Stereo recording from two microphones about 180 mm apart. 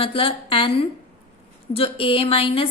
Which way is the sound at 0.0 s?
30° left (ahead or behind).